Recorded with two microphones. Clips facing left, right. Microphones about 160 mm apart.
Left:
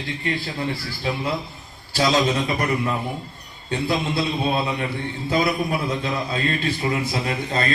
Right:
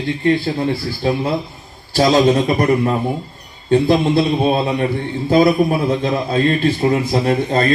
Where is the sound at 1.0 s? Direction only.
40° right (ahead or behind).